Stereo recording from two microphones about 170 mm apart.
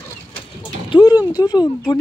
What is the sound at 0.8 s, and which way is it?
Speech, 25° left (ahead or behind).